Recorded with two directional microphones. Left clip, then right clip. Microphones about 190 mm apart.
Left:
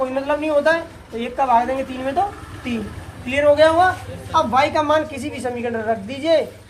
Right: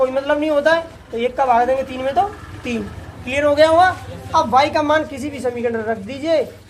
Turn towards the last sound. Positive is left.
turn(degrees=-20)  # may be behind; listen again after turning